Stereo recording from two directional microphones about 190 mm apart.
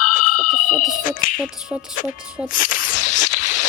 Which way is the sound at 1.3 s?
5° right (ahead or behind).